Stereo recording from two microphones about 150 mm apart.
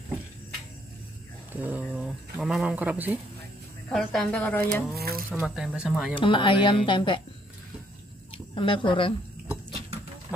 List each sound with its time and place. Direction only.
1.5 s speech: 10° right (ahead or behind)
3.9 s speech: 5° left (ahead or behind)
4.9 s speech: 90° right
5.3 s speech: 5° right (ahead or behind)
6.1 s speech: 35° left (ahead or behind)
8.5 s speech: 35° left (ahead or behind)